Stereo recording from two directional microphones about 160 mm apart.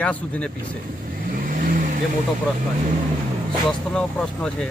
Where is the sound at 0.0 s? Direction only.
10° left (ahead or behind).